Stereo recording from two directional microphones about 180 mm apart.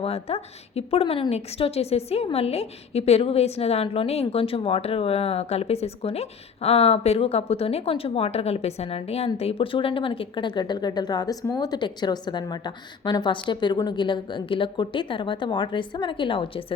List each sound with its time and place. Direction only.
0.0 s a woman's voice: 35° left (ahead or behind)